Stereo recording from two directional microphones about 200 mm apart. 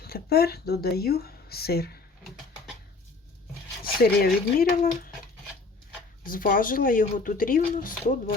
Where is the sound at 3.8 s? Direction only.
50° left (ahead or behind).